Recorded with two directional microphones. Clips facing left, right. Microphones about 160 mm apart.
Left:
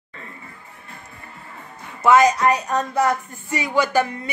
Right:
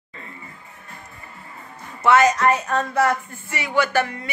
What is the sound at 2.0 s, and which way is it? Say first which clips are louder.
Speech: left 1 dB; 10° left (ahead or behind).